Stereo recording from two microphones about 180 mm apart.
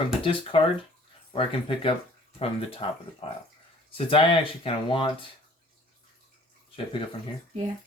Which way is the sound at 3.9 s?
30° left (ahead or behind).